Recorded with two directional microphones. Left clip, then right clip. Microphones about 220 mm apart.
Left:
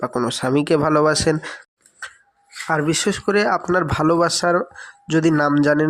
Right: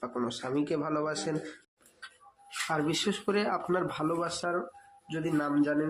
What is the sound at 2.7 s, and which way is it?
A man's voice, 35° left (ahead or behind).